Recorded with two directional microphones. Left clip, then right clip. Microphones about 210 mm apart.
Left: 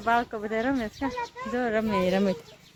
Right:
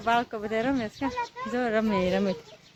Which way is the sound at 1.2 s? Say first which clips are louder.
Even; 25° right (ahead or behind).